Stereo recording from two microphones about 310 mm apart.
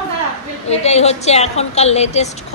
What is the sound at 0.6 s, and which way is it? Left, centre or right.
Speech, left.